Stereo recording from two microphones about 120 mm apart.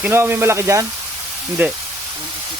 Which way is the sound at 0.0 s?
20° right (ahead or behind).